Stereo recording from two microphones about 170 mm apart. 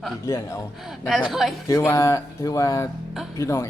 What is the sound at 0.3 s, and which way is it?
Speech, 20° left (ahead or behind).